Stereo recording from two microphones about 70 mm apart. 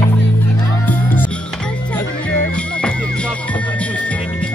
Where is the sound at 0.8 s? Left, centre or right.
Left.